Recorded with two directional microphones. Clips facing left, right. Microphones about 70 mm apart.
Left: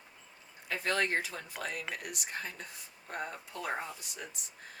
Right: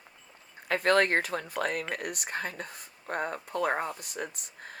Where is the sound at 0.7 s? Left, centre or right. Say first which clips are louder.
Right 8 dB; right.